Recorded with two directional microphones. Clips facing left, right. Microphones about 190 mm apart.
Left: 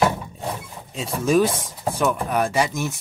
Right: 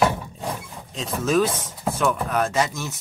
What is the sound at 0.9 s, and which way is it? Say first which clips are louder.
Speech: left 2 dB; 10° left (ahead or behind).